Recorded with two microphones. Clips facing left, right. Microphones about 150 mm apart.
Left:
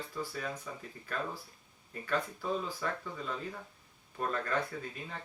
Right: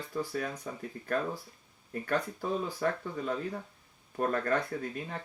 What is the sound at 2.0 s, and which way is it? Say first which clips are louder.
Speech: right 2 dB; 50° right (ahead or behind).